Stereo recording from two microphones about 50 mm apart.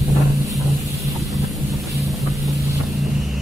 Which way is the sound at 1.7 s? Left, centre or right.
Right.